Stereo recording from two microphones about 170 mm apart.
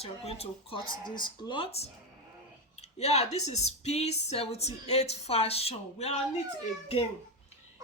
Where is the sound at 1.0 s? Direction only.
25° left (ahead or behind).